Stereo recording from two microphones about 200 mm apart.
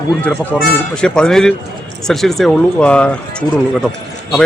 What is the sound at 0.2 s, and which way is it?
Speech, 5° left (ahead or behind).